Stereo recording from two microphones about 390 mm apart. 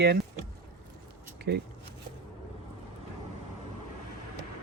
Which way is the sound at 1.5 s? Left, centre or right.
Right.